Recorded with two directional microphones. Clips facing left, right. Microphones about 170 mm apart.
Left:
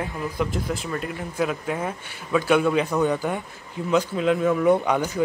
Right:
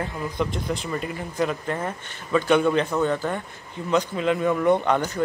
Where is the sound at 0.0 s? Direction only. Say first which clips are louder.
Even; 5° left (ahead or behind).